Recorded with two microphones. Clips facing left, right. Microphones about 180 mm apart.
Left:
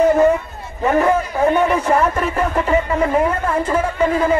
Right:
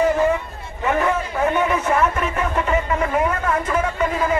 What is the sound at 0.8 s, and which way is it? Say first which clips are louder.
A man's voice: left 5 dB; 35° left (ahead or behind).